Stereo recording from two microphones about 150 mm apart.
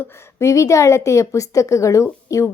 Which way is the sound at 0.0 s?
15° left (ahead or behind).